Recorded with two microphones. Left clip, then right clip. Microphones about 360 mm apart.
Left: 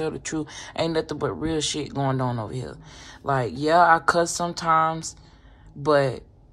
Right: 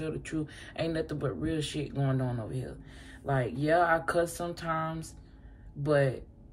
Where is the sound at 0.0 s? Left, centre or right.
Centre.